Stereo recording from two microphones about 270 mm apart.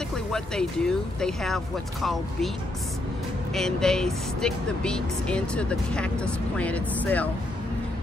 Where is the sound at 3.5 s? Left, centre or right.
Centre.